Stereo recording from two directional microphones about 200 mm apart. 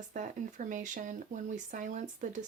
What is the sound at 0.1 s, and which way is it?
Speech, 40° right (ahead or behind).